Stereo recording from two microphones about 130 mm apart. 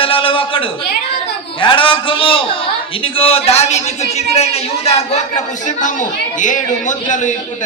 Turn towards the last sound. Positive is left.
turn(degrees=75)  # may be behind; listen again after turning